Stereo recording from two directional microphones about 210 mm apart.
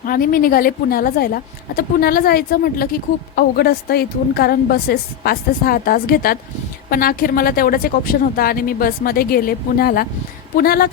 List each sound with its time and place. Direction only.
0.0 s speech: 40° left (ahead or behind)